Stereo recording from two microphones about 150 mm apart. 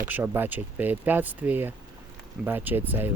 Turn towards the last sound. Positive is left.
turn(degrees=-15)  # may be behind; listen again after turning